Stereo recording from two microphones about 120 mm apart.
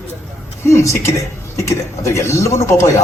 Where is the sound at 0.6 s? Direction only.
25° left (ahead or behind).